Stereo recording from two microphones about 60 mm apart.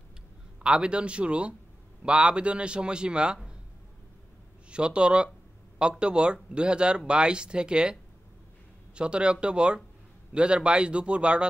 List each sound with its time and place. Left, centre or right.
0.6 s a man's voice: centre
4.6 s a man's voice: centre